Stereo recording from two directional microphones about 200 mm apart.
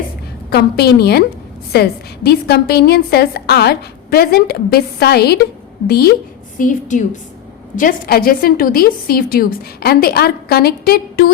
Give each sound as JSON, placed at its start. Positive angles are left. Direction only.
{"t": 0.5, "sound": "a woman's voice", "side_deg": 55}
{"t": 6.6, "sound": "a woman's voice", "side_deg": 40}